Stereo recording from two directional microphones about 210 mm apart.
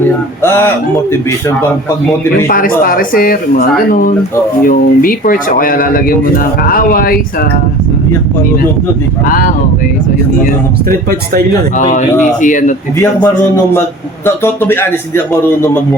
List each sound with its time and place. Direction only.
0.4 s a man's voice: 10° left (ahead or behind)
2.5 s speech: 40° left (ahead or behind)
9.2 s speech: 40° left (ahead or behind)
11.8 s speech: 35° left (ahead or behind)
13.0 s a man's voice: 10° left (ahead or behind)